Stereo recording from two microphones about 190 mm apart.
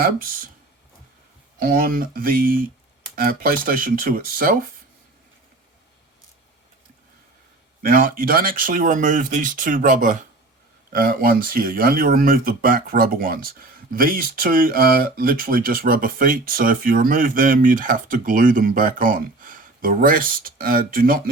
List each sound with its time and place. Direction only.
0.0 s speech: 50° right (ahead or behind)
1.5 s speech: 50° right (ahead or behind)
7.8 s speech: 50° right (ahead or behind)